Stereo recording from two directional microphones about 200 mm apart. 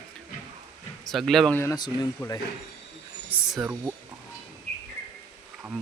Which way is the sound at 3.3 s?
5° right (ahead or behind).